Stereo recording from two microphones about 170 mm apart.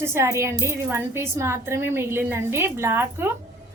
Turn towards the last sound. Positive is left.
turn(degrees=-15)  # may be behind; listen again after turning